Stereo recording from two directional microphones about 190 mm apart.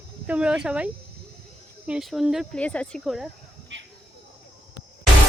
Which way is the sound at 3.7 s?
70° right (ahead or behind).